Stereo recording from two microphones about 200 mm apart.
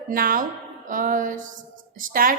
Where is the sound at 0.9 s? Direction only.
40° right (ahead or behind).